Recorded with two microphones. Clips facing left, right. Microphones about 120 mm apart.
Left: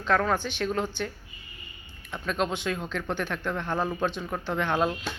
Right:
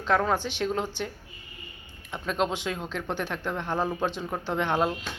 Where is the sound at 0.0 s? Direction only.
20° right (ahead or behind).